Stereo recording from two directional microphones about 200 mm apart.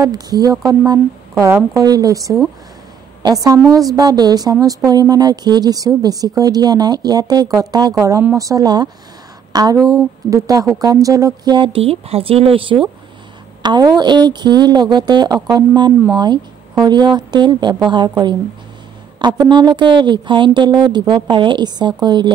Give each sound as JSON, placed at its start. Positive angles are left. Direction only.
{"t": 0.0, "sound": "a woman's voice", "side_deg": -20}